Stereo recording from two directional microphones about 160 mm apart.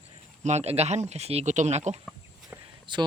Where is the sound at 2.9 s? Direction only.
30° right (ahead or behind).